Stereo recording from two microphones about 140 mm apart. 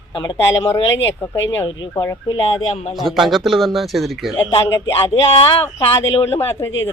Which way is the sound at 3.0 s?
Centre (ahead or behind).